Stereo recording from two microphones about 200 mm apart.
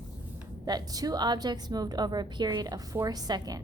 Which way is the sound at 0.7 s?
20° right (ahead or behind).